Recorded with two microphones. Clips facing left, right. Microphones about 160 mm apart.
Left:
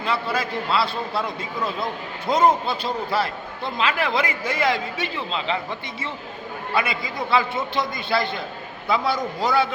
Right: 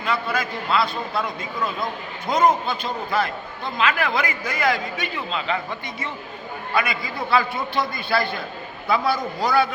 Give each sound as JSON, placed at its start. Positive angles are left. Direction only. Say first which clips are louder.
{"t": 0.0, "sound": "a man's voice", "louder": "even", "side_deg": 30}
{"t": 6.7, "sound": "a man's voice", "louder": "even", "side_deg": 25}